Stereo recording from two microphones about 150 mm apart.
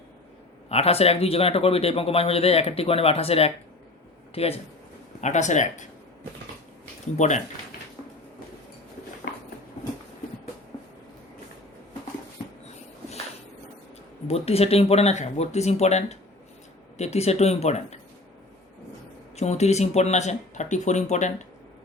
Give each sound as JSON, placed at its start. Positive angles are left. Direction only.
{"t": 0.7, "sound": "a man's voice", "side_deg": 40}
{"t": 5.2, "sound": "speech", "side_deg": 55}
{"t": 7.2, "sound": "speech", "side_deg": 50}
{"t": 14.3, "sound": "speech", "side_deg": 45}
{"t": 19.4, "sound": "speech", "side_deg": 45}